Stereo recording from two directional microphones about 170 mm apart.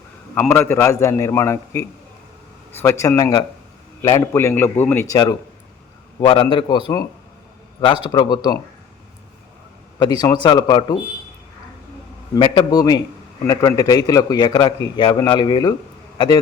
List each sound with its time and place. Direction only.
0.3 s a man's voice: 10° left (ahead or behind)
8.0 s a man's voice: 25° left (ahead or behind)
10.0 s a man's voice: 25° left (ahead or behind)
12.3 s a man's voice: 25° left (ahead or behind)